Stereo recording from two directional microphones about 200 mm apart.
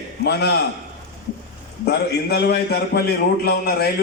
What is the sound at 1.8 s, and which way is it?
A man's voice, 55° left (ahead or behind).